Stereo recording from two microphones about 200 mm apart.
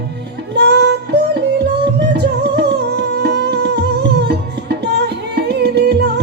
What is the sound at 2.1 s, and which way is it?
Music, 55° right (ahead or behind).